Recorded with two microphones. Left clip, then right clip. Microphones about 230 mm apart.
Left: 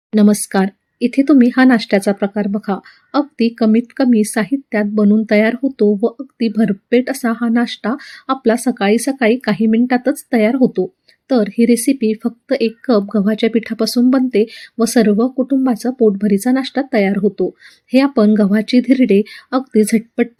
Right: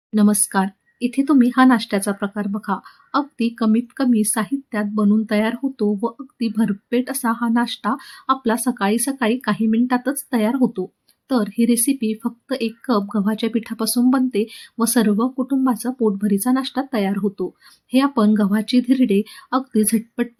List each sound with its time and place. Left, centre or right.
0.1 s a woman's voice: centre
11.7 s speech: right
11.9 s speech: centre